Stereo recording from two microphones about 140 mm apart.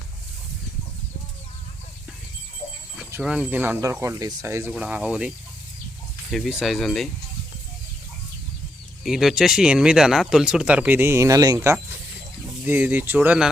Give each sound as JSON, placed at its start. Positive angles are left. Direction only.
{"t": 3.1, "sound": "speech", "side_deg": -5}
{"t": 4.7, "sound": "speech", "side_deg": -10}
{"t": 6.3, "sound": "speech", "side_deg": 0}
{"t": 9.0, "sound": "speech", "side_deg": -5}